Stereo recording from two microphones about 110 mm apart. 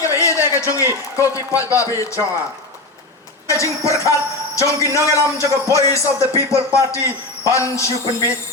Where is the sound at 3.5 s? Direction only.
30° left (ahead or behind).